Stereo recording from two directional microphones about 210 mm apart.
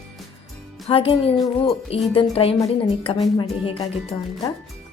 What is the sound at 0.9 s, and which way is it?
A woman's voice, 25° left (ahead or behind).